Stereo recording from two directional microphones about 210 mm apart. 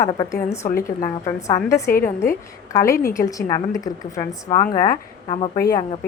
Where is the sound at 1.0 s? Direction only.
15° left (ahead or behind).